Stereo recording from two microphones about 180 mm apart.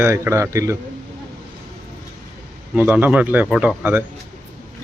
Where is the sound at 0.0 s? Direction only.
15° right (ahead or behind).